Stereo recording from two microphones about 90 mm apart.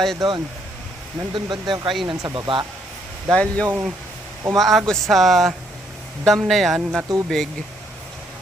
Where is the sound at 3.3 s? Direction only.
15° left (ahead or behind).